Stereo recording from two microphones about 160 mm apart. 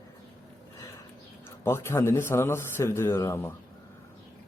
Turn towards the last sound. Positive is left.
turn(degrees=15)  # may be behind; listen again after turning